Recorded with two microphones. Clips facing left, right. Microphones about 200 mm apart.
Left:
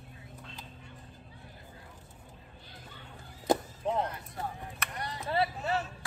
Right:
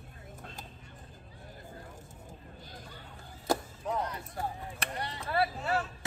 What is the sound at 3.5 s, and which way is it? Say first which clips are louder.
Chop: left 3 dB; 20° left (ahead or behind).